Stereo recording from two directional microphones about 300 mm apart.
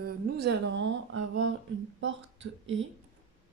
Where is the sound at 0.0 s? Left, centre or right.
Right.